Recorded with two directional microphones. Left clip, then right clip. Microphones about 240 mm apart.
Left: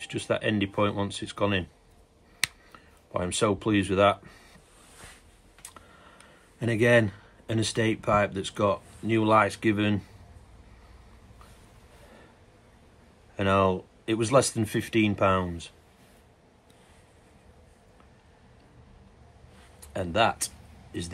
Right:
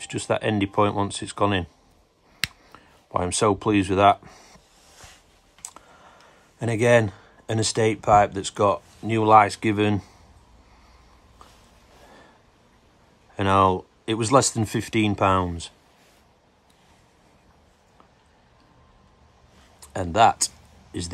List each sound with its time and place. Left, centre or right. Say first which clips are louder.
0.0 s speech: right 3 dB; right
2.7 s speech: right 6 dB; right
5.6 s clicking: right 5 dB; centre
6.6 s speech: right 3 dB; right
13.4 s speech: right 5 dB; right
19.8 s speech: right 7 dB; right